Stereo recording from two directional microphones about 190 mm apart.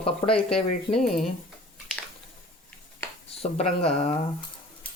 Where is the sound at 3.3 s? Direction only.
30° left (ahead or behind).